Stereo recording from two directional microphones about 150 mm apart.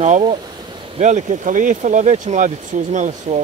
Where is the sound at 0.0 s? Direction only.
45° right (ahead or behind).